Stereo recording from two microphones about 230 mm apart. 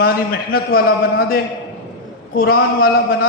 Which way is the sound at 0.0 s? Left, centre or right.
Left.